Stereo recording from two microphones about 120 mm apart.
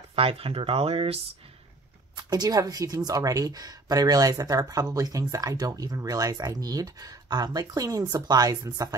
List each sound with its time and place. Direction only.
0.1 s speech: 55° right (ahead or behind)
2.1 s speech: 35° right (ahead or behind)